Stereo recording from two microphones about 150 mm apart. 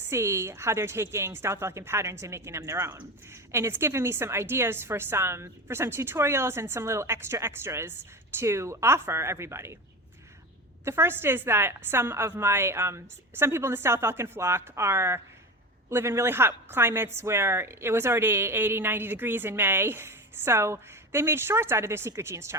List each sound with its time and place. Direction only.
0.0 s a woman's voice: 15° right (ahead or behind)
10.8 s a woman's voice: 15° right (ahead or behind)